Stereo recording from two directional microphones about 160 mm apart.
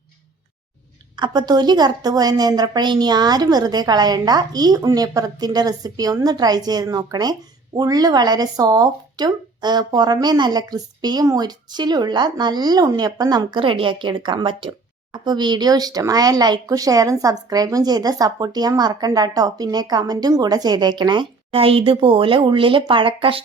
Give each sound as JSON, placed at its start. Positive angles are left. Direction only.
{"t": 1.1, "sound": "speech", "side_deg": -25}